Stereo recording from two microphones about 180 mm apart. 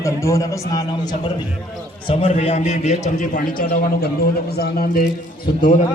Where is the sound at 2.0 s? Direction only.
35° left (ahead or behind); by 5.0 s 55° left (ahead or behind).